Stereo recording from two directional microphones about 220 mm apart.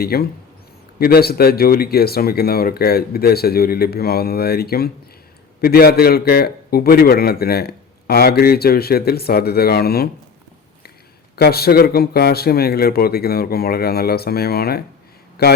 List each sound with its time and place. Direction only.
0.0 s a man's voice: 45° left (ahead or behind)
11.3 s a man's voice: 45° left (ahead or behind)